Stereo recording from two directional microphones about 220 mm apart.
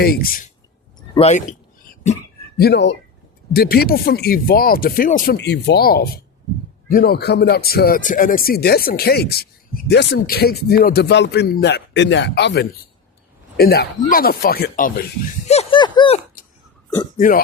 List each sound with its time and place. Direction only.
0.0 s speech: 40° left (ahead or behind)
1.1 s a sound: 30° left (ahead or behind)
2.6 s speech: 50° left (ahead or behind)
15.4 s speech: 25° left (ahead or behind)
17.2 s speech: 40° left (ahead or behind)